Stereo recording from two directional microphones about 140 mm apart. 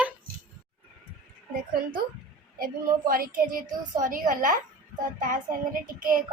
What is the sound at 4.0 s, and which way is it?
Speech, 75° right (ahead or behind).